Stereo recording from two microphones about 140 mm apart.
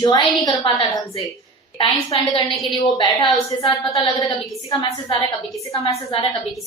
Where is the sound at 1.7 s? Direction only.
40° left (ahead or behind).